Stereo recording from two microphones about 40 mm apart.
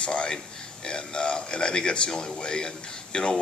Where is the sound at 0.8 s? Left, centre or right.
Left.